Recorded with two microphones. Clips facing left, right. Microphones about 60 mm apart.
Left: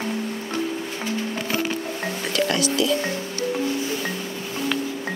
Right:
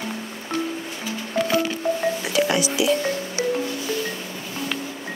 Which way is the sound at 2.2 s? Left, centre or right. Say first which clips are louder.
Left 2 dB; centre.